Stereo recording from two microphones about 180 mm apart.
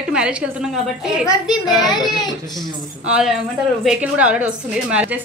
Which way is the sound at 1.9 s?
25° left (ahead or behind).